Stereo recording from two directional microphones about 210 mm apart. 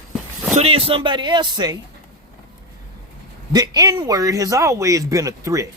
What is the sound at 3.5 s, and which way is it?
Speech, 20° right (ahead or behind).